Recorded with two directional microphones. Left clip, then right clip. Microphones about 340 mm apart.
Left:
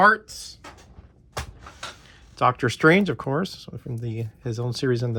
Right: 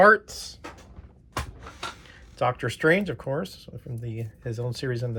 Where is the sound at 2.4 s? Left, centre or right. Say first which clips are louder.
Left 5 dB; centre.